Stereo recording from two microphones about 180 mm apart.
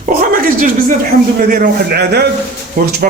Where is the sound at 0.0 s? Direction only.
50° right (ahead or behind).